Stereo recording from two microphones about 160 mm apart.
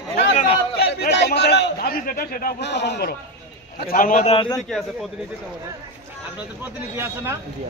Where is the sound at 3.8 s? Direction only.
65° left (ahead or behind).